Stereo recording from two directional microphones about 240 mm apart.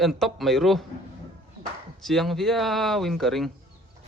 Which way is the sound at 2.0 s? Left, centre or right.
Centre.